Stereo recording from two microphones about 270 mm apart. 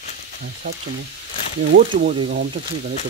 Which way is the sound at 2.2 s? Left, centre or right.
Right.